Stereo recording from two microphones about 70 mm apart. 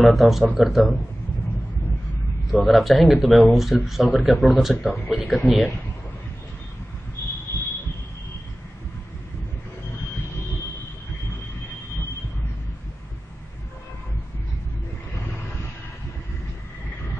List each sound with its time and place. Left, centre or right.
0.0 s speech: centre
2.6 s speech: centre
7.5 s a sound: left